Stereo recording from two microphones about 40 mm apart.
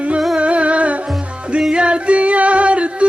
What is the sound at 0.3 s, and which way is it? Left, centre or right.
Music, right.